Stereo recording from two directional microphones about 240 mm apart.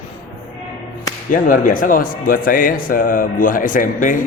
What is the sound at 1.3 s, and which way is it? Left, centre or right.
A man's voice, left.